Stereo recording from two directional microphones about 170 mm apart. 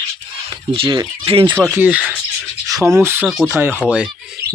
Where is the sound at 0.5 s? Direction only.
30° right (ahead or behind).